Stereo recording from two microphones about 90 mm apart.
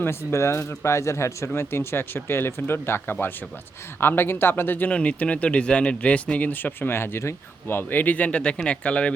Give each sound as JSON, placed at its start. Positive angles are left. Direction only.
{"t": 0.0, "sound": "speech", "side_deg": 30}